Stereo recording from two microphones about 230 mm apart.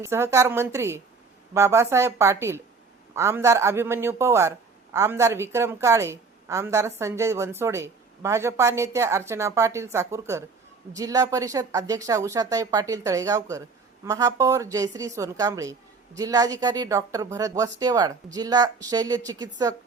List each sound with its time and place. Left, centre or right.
0.0 s a woman's voice: centre